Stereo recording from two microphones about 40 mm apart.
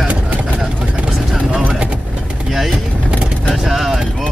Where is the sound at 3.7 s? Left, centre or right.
Centre.